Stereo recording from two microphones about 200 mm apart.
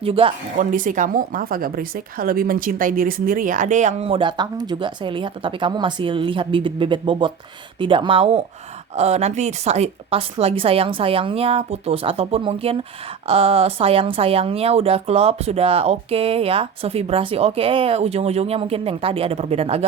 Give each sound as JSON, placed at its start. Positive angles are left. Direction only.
{"t": 0.0, "sound": "a woman's voice", "side_deg": -25}
{"t": 0.6, "sound": "a woman's voice", "side_deg": -40}